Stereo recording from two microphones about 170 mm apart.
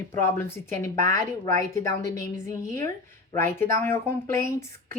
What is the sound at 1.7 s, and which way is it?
A woman's voice, 15° left (ahead or behind).